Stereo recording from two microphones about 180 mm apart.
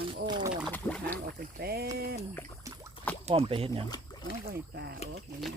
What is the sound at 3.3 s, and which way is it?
Speech, 30° right (ahead or behind).